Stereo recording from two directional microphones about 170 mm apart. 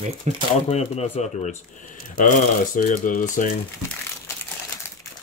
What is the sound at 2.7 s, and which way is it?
Speech, 55° left (ahead or behind).